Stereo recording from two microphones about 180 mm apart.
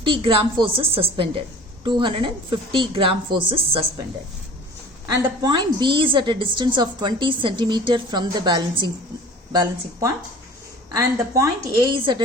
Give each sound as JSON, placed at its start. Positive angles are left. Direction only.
{"t": 0.0, "sound": "a woman's voice", "side_deg": -30}
{"t": 5.0, "sound": "a woman's voice", "side_deg": -25}